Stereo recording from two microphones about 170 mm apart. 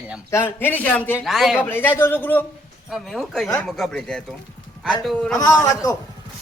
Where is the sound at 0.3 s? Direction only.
15° left (ahead or behind).